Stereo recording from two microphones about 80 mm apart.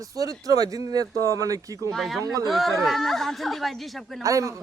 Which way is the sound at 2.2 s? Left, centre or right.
Right.